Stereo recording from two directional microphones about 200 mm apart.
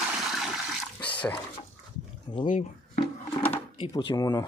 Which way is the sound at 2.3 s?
25° left (ahead or behind).